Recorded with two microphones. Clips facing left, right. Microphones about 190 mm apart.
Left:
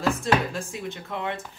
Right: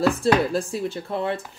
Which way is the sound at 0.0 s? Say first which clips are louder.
Right 5 dB; 35° right (ahead or behind).